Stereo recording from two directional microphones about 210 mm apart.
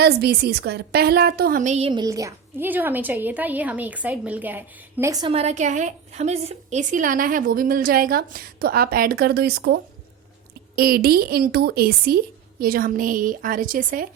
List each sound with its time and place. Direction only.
0.0 s a woman's voice: 50° right (ahead or behind); by 5.3 s 15° right (ahead or behind)
5.3 s a woman's voice: 30° right (ahead or behind); by 9.7 s 50° right (ahead or behind)
10.8 s a woman's voice: 45° right (ahead or behind)